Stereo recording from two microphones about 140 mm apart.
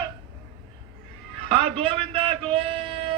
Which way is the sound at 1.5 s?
40° right (ahead or behind).